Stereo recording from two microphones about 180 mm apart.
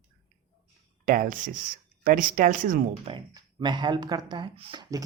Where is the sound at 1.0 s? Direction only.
50° right (ahead or behind).